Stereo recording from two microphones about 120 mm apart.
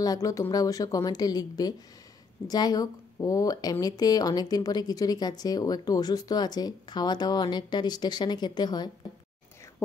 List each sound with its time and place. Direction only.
0.0 s speech: 30° left (ahead or behind)